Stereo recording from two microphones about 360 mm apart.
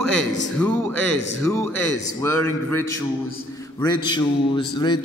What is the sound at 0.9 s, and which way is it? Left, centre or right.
A man's voice, right.